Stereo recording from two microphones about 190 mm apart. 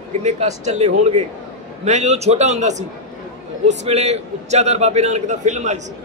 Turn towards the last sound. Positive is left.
turn(degrees=-40)  # may be behind; listen again after turning